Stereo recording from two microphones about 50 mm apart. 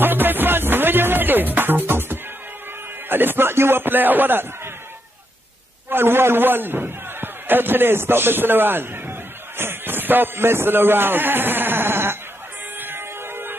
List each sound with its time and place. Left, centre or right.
0.0 s music: right
3.1 s speech: right
5.9 s a man's voice: right
12.7 s siren: right